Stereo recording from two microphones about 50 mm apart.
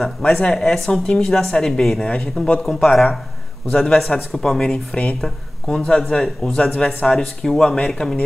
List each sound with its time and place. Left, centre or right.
0.2 s a woman's voice: centre
1.0 s a woman's voice: centre
2.6 s a woman's voice: centre
5.7 s a woman's voice: centre
5.9 s a woman's voice: centre
6.2 s speech: centre
6.7 s a woman's voice: centre